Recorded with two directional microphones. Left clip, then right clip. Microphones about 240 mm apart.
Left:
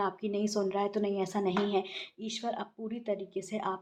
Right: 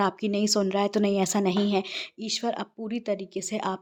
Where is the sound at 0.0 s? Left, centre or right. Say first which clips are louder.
Right 6 dB; right.